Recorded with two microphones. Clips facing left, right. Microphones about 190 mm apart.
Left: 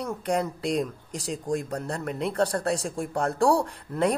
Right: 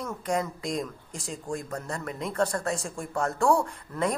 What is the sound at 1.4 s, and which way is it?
A woman's voice, 35° left (ahead or behind).